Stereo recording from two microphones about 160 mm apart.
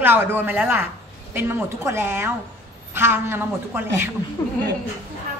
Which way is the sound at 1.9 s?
15° right (ahead or behind).